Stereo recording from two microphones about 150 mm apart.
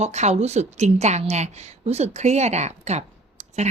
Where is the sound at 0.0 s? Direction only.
50° right (ahead or behind).